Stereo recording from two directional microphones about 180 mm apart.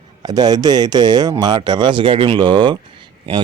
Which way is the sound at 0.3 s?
20° right (ahead or behind).